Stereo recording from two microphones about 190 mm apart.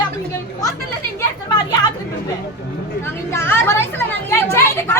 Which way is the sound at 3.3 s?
15° left (ahead or behind).